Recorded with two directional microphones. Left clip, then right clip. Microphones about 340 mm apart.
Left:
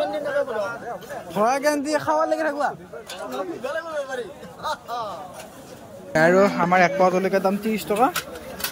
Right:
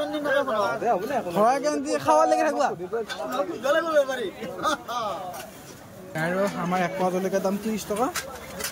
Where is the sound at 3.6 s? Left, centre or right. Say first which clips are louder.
Right 9 dB; right.